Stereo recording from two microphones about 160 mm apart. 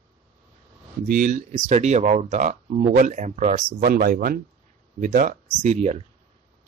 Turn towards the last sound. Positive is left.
turn(degrees=-45)  # may be behind; listen again after turning